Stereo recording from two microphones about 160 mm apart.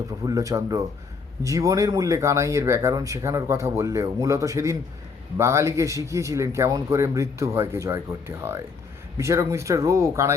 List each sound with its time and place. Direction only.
0.3 s speech: 20° right (ahead or behind)
9.1 s speech: 20° right (ahead or behind)